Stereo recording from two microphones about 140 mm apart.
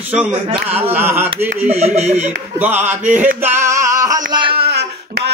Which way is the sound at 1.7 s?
50° right (ahead or behind).